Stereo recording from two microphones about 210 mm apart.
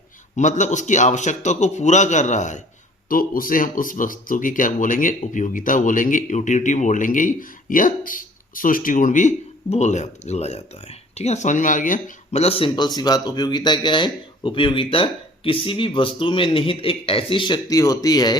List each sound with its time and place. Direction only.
0.3 s speech: 35° left (ahead or behind); by 18.3 s 20° left (ahead or behind)